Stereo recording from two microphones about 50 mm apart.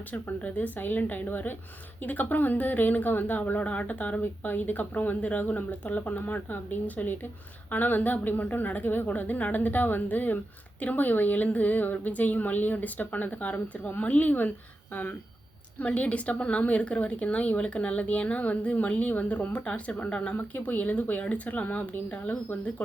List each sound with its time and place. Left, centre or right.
0.1 s speech: left
15.8 s a woman's voice: left
20.3 s speech: left